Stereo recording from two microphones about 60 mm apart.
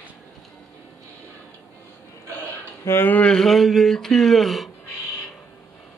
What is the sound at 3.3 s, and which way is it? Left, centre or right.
Speech, centre.